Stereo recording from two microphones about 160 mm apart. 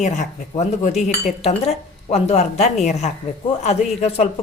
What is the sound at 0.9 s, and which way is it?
Speech, 45° left (ahead or behind).